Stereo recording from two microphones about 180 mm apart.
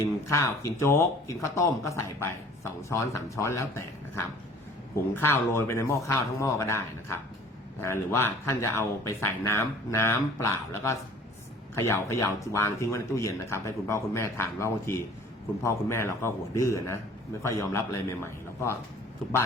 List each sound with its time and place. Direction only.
0.0 s speech: 15° left (ahead or behind)